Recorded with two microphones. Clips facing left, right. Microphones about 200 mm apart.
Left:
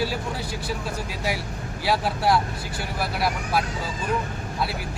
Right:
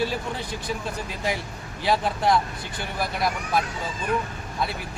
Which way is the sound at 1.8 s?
5° left (ahead or behind).